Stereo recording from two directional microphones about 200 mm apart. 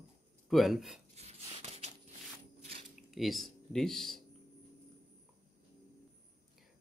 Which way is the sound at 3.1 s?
Centre (ahead or behind).